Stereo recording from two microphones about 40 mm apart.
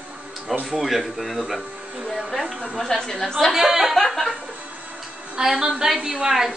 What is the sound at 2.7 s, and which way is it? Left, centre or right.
Speech, centre.